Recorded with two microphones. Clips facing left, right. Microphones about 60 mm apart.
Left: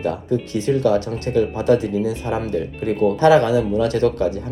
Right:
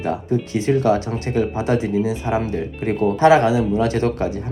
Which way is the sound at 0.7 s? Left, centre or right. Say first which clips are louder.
Even; right.